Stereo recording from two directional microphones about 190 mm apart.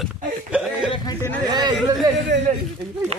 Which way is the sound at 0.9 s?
20° left (ahead or behind).